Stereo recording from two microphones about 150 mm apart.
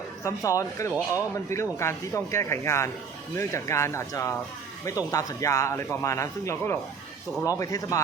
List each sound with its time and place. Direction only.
0.3 s a man's voice: 20° left (ahead or behind)